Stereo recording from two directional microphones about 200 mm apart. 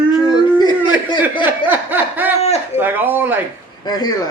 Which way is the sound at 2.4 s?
30° left (ahead or behind).